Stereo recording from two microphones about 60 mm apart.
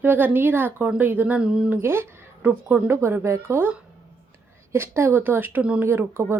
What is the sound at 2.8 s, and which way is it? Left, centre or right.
Speech, right.